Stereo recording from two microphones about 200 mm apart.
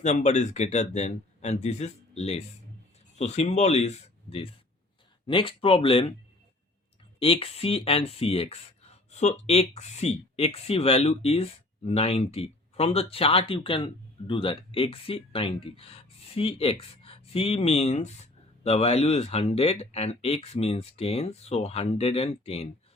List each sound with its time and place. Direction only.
0.0 s speech: 35° left (ahead or behind)
7.2 s speech: 30° left (ahead or behind)